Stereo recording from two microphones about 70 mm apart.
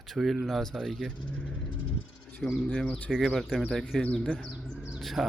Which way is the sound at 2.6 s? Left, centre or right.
Centre.